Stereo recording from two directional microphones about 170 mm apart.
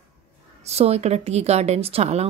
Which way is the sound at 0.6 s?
40° right (ahead or behind).